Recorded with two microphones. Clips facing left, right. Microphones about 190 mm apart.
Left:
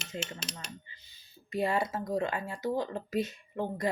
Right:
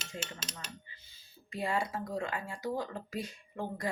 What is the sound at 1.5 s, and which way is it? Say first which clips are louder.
Speech: left 4 dB; 25° left (ahead or behind).